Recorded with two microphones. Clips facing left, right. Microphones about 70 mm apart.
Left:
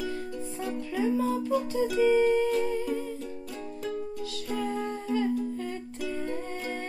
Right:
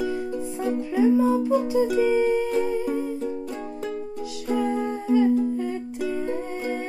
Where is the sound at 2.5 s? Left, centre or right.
Centre.